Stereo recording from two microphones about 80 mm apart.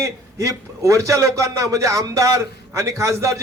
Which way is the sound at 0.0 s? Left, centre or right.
Right.